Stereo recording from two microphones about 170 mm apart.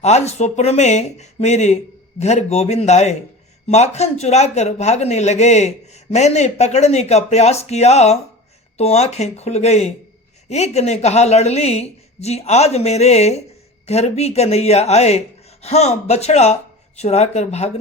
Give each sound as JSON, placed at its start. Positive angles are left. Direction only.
{"t": 0.0, "sound": "speech", "side_deg": 40}